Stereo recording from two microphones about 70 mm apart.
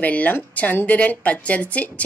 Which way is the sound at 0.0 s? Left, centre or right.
Left.